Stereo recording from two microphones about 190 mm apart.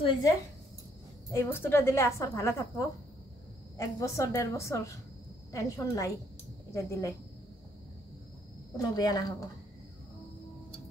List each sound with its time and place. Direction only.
0.0 s a woman's voice: 25° left (ahead or behind)
1.3 s a woman's voice: 10° left (ahead or behind)
3.7 s a woman's voice: 15° left (ahead or behind)
8.7 s a woman's voice: 20° left (ahead or behind)